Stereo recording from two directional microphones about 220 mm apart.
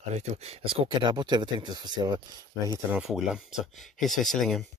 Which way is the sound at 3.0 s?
Centre (ahead or behind).